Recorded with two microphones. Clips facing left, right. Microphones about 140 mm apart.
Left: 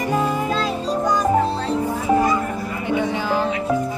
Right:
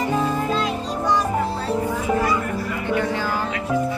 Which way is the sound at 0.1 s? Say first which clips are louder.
Left 4 dB; 10° left (ahead or behind).